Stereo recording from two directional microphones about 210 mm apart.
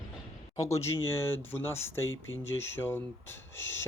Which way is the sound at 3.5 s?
65° left (ahead or behind).